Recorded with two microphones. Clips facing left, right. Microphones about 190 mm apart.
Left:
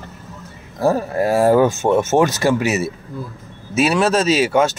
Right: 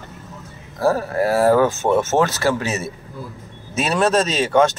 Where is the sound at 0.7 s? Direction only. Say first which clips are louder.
Left 1 dB; 20° left (ahead or behind).